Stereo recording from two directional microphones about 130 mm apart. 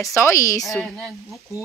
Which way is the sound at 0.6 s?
Centre (ahead or behind).